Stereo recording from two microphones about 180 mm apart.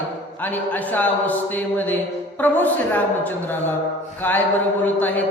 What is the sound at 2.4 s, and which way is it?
Mantra, 10° left (ahead or behind).